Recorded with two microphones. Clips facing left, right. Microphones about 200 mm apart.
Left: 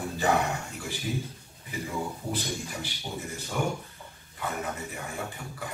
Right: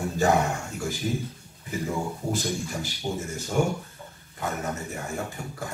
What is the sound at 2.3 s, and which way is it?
Speech, 45° right (ahead or behind).